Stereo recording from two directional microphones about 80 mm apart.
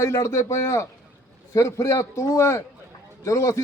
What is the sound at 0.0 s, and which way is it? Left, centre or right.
A man's voice, left.